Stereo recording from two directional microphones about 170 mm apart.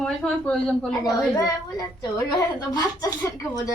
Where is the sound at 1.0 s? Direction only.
20° left (ahead or behind).